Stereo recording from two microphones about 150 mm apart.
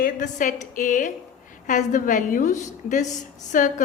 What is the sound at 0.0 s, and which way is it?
A woman's voice, 60° left (ahead or behind).